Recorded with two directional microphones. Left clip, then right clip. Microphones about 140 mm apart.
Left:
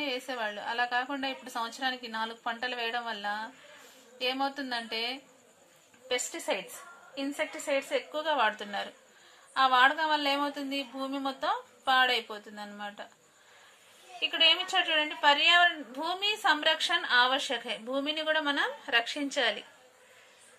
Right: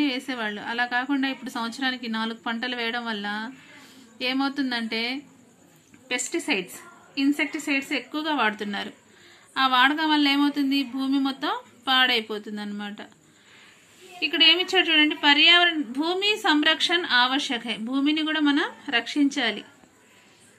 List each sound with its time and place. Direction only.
0.0 s a woman's voice: 50° left (ahead or behind)
7.2 s a woman's voice: 60° left (ahead or behind)
14.2 s a woman's voice: 60° left (ahead or behind)